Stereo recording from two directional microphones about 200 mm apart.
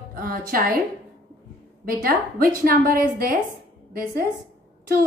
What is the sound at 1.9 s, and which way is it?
A woman's voice, 45° right (ahead or behind).